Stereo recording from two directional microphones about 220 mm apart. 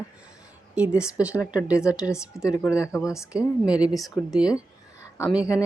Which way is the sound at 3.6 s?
5° right (ahead or behind).